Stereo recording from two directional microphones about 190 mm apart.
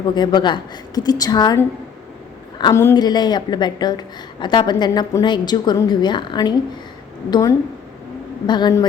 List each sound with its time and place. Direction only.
0.1 s a woman's voice: 25° left (ahead or behind)